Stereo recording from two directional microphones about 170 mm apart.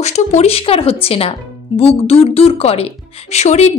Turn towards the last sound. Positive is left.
turn(degrees=40)  # may be behind; listen again after turning